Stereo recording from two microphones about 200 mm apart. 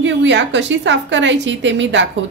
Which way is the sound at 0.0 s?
65° right (ahead or behind).